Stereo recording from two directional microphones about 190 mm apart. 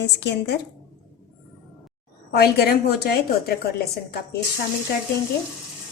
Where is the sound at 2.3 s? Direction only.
55° left (ahead or behind).